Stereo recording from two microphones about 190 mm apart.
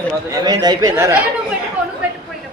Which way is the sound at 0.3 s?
20° right (ahead or behind).